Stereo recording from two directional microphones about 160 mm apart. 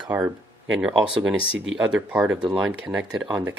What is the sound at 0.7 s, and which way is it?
Speech, 5° right (ahead or behind).